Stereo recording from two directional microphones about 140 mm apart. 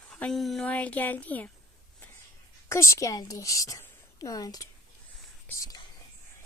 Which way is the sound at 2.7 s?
20° left (ahead or behind).